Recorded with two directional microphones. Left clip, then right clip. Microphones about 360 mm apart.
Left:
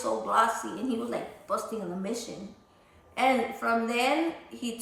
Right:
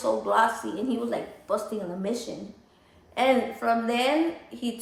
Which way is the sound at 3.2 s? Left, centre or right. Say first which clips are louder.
Right 2 dB; centre.